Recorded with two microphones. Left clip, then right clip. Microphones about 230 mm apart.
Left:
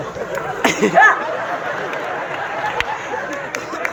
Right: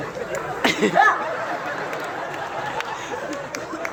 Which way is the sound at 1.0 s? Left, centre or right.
Right.